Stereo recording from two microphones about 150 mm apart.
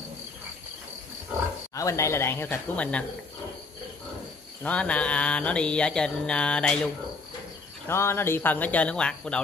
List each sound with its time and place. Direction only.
1.8 s mantra: 20° left (ahead or behind)
4.6 s mantra: 10° left (ahead or behind)
7.9 s mantra: 15° left (ahead or behind)